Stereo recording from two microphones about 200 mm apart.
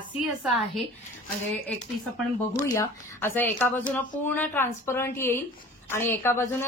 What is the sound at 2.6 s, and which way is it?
A woman's voice, 15° left (ahead or behind).